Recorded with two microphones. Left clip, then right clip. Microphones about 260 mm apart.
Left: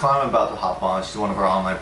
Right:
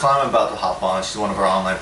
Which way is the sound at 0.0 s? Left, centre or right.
Centre.